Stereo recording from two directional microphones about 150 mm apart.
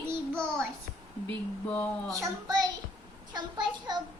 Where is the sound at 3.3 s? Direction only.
30° right (ahead or behind).